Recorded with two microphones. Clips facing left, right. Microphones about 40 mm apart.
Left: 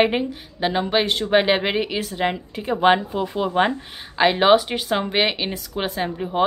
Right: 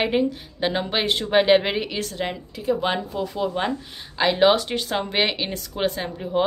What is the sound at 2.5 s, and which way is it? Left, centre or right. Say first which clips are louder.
Speech: left 6 dB; left.